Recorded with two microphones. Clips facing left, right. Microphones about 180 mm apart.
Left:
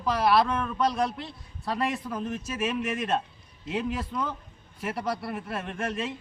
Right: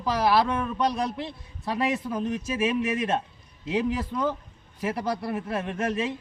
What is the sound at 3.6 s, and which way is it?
A man's voice, 20° right (ahead or behind).